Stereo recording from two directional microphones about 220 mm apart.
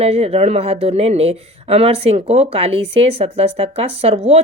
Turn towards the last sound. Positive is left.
turn(degrees=-25)  # may be behind; listen again after turning